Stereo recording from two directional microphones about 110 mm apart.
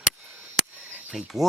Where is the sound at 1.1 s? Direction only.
Centre (ahead or behind).